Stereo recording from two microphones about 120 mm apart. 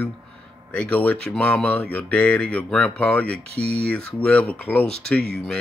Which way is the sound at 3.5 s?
55° right (ahead or behind).